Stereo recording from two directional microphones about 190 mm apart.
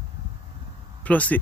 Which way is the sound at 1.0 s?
10° left (ahead or behind).